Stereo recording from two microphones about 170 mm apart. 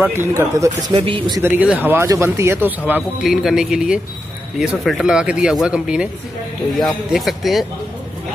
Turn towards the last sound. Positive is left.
turn(degrees=0)  # may be behind; listen again after turning